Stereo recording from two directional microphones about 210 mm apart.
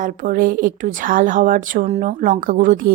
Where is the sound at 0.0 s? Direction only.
40° right (ahead or behind).